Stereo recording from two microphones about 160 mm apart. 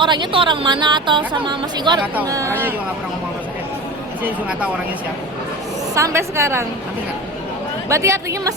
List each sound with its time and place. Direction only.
0.0 s a woman's voice: 30° right (ahead or behind)
4.2 s a woman's voice: 5° right (ahead or behind)
5.9 s a woman's voice: 15° right (ahead or behind)
7.9 s a woman's voice: 20° right (ahead or behind)